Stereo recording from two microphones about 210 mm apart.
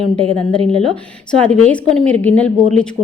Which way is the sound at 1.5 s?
5° left (ahead or behind).